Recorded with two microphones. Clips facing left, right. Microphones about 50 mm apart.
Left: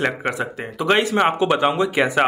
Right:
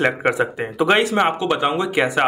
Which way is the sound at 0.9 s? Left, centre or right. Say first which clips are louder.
Even; centre.